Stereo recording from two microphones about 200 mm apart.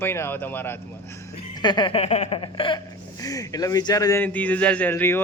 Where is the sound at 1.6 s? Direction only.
20° left (ahead or behind).